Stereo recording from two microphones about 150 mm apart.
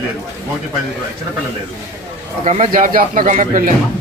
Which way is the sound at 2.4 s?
55° right (ahead or behind).